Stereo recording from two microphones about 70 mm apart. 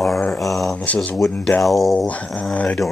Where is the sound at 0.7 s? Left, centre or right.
Left.